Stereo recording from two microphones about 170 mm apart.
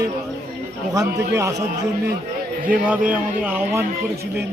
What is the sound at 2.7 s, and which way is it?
Speech, 10° right (ahead or behind).